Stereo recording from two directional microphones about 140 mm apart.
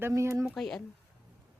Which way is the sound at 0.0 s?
20° right (ahead or behind).